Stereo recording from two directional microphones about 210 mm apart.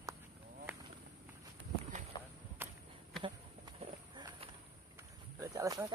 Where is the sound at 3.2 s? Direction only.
20° right (ahead or behind).